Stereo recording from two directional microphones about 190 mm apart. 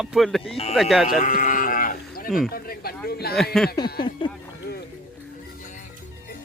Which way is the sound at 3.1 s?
55° left (ahead or behind).